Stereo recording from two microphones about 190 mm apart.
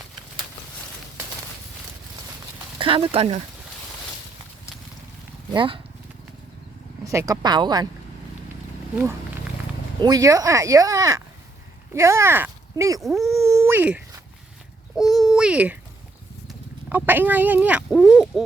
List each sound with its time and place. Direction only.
2.7 s speech: 30° right (ahead or behind)
5.5 s speech: 30° right (ahead or behind)
7.0 s speech: 15° right (ahead or behind)
10.0 s speech: 20° right (ahead or behind)
13.0 s speech: centre (ahead or behind)
13.5 s wail: 15° right (ahead or behind)
14.9 s a sound: centre (ahead or behind)
16.5 s speech: 10° right (ahead or behind)